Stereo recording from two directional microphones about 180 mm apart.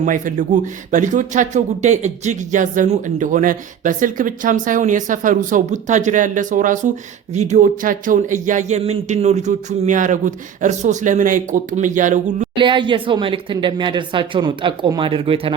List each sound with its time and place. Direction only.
0.0 s a man's voice: 45° right (ahead or behind)
12.5 s speech: 25° right (ahead or behind)